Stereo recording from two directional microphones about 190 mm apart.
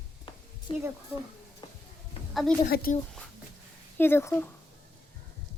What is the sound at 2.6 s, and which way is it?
Speech, 55° left (ahead or behind).